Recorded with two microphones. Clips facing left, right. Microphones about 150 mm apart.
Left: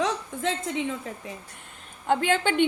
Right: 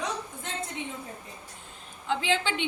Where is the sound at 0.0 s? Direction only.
90° left.